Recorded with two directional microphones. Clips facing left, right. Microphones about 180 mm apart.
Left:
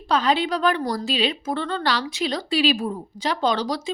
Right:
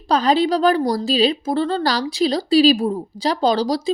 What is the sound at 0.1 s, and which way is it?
A woman's voice, 35° right (ahead or behind).